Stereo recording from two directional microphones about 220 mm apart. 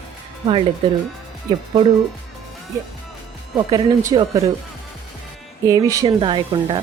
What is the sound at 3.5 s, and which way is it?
Speech, 20° right (ahead or behind).